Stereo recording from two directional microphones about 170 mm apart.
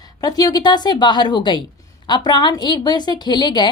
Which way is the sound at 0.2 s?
20° left (ahead or behind).